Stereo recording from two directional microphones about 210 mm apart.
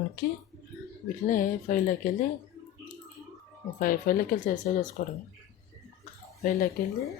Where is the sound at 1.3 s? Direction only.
40° left (ahead or behind).